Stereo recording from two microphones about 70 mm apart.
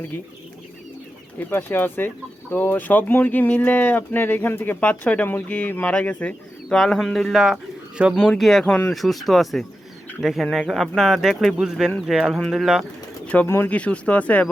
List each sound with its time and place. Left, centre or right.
1.4 s speech: left
4.8 s speech: centre
6.7 s speech: centre
8.1 s speech: centre
13.2 s speech: centre